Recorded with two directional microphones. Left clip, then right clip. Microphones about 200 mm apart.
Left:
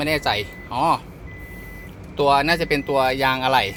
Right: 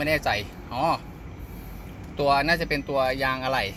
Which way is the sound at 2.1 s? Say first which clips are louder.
Left 4 dB; 15° left (ahead or behind).